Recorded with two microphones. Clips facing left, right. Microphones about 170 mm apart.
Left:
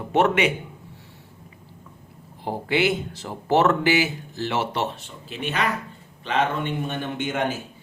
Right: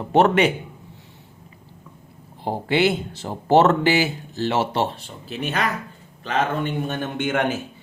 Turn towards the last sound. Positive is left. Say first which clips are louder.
# right 3 dB
turn(degrees=-60)  # may be behind; listen again after turning